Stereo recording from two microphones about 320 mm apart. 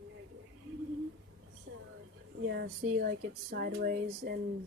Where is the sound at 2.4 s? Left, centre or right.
Right.